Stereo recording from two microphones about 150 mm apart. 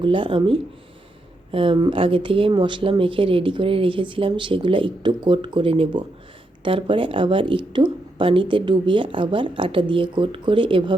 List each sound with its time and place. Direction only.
0.0 s speech: 35° right (ahead or behind)